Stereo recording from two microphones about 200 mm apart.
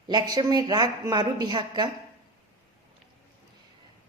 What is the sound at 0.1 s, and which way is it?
A woman's voice, 20° right (ahead or behind).